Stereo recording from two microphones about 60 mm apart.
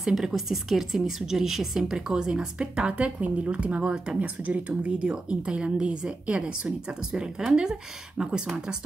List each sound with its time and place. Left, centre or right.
0.0 s a woman's voice: centre